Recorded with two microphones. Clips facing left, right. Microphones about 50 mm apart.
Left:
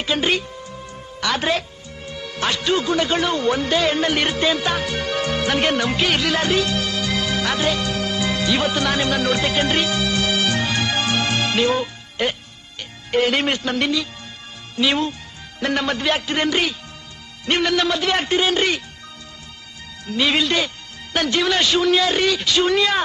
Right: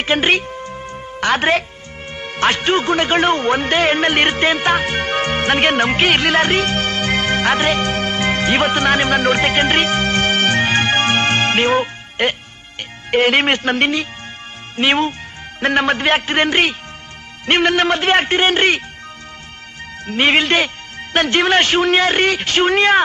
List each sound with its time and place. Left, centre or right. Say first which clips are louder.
0.0 s music: right 5 dB; right
2.0 s a man's voice: right 6 dB; right
20.1 s a man's voice: right 5 dB; right